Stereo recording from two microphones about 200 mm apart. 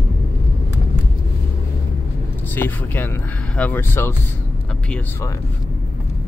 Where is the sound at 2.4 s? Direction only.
10° left (ahead or behind).